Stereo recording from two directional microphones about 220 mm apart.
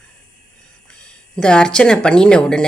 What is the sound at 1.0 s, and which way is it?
Speech, 5° left (ahead or behind).